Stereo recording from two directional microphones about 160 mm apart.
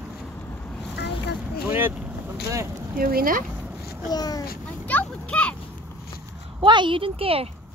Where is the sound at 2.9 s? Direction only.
65° right (ahead or behind).